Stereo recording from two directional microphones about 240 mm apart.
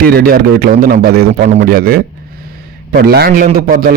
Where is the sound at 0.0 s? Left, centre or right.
Right.